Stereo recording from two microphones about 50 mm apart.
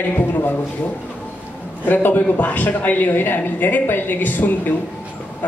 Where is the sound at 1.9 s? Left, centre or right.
Left.